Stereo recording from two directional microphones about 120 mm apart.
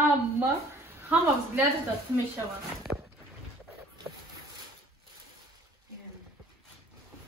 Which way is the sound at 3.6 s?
25° right (ahead or behind).